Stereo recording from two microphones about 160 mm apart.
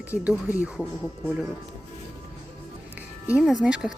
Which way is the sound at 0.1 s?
10° right (ahead or behind).